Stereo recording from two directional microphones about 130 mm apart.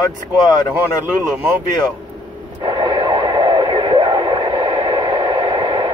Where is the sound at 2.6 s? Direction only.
35° right (ahead or behind).